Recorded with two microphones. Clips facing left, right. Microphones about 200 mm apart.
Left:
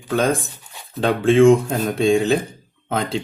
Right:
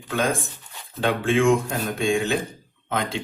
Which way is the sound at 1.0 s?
40° left (ahead or behind).